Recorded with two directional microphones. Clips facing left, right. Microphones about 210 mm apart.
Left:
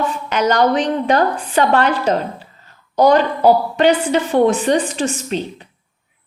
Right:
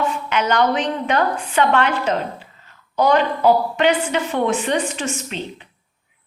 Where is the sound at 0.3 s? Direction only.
40° left (ahead or behind).